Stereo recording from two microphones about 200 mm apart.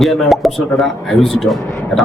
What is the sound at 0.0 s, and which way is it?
Speech, centre (ahead or behind).